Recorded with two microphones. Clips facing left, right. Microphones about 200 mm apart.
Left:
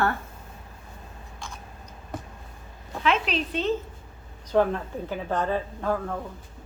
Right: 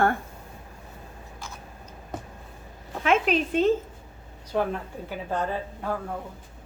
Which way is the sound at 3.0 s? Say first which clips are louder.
Right 3 dB; 50° right (ahead or behind).